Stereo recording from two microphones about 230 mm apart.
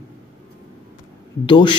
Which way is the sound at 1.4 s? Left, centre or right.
Left.